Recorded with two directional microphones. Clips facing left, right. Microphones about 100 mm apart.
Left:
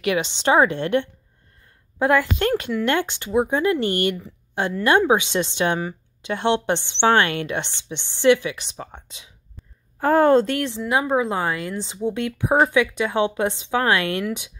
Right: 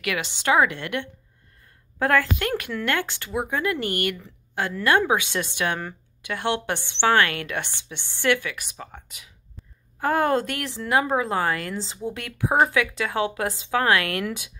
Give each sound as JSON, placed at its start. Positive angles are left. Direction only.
{"t": 0.0, "sound": "a woman's voice", "side_deg": 25}
{"t": 2.0, "sound": "a woman's voice", "side_deg": 20}
{"t": 10.8, "sound": "a woman's voice", "side_deg": 15}